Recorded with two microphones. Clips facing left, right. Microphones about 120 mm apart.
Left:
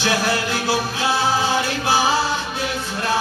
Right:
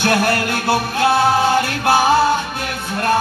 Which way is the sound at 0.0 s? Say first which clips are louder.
Right 4 dB; 55° right (ahead or behind).